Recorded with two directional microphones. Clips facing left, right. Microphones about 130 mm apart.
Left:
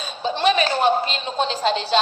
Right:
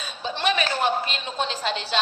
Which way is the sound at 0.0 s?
30° left (ahead or behind).